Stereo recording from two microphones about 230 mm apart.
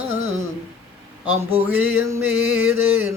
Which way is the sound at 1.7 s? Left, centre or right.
Centre.